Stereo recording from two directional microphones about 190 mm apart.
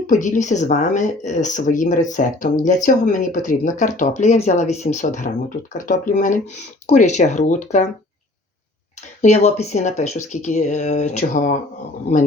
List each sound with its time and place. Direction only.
0.1 s speech: 40° left (ahead or behind)
9.2 s speech: 35° left (ahead or behind)